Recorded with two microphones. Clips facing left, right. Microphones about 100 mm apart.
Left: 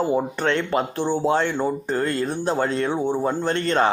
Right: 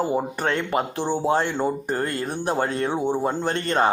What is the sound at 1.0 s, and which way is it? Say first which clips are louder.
Speech: left 2 dB; 15° right (ahead or behind).